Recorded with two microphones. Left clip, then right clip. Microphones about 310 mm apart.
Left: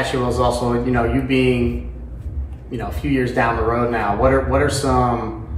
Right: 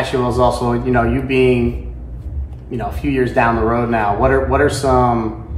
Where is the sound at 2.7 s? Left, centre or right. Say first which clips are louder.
Right 3 dB; right.